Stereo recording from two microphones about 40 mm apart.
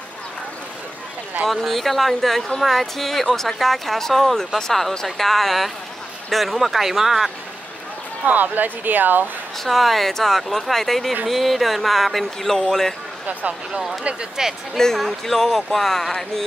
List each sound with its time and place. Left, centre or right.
1.5 s speech: centre
8.3 s speech: right
9.6 s speech: centre
13.3 s speech: right
14.3 s speech: centre
15.0 s speech: centre